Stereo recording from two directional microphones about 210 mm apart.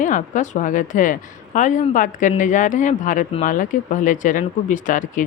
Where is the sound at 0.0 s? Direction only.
35° left (ahead or behind).